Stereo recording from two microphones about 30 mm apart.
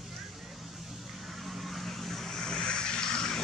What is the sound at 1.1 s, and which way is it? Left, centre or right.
Vehicle, centre.